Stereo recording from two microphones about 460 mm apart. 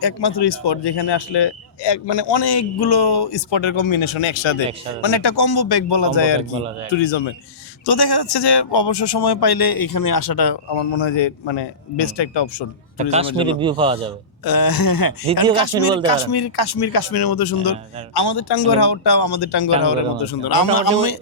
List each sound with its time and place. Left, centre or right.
0.0 s speech: left
5.0 s speech: left
7.9 s speech: left
13.0 s a man's voice: centre
14.4 s speech: left